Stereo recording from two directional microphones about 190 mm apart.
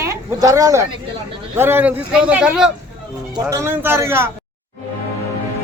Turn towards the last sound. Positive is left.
turn(degrees=-15)  # may be behind; listen again after turning